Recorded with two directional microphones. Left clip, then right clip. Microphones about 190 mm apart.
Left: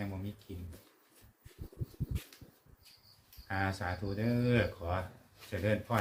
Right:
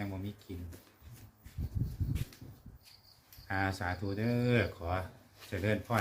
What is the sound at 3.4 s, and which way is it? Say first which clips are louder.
Speech: right 1 dB; 20° right (ahead or behind).